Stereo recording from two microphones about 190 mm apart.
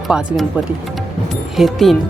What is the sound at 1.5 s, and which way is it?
Speech, centre (ahead or behind).